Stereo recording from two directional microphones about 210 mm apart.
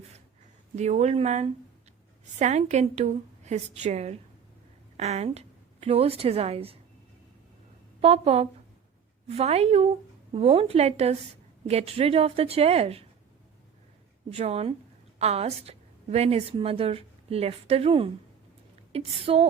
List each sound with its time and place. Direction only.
0.8 s a woman's voice: 30° right (ahead or behind)
8.0 s a woman's voice: 30° right (ahead or behind)
14.3 s a woman's voice: 30° right (ahead or behind)